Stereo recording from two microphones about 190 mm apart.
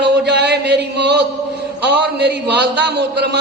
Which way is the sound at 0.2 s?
60° right (ahead or behind).